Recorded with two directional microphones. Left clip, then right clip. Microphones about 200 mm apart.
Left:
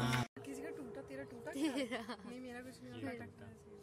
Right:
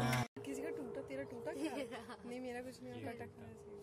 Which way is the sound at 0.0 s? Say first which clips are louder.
Even; centre (ahead or behind).